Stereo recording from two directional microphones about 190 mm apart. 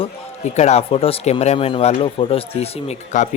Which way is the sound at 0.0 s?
35° left (ahead or behind).